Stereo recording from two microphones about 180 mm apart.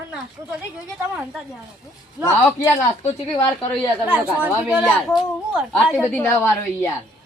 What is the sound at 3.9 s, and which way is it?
A woman's voice, 5° right (ahead or behind).